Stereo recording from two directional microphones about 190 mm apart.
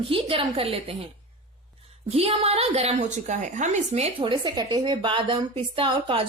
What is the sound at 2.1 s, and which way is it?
A woman's voice, 30° right (ahead or behind).